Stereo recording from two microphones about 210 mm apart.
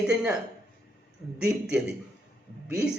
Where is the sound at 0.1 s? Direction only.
5° right (ahead or behind).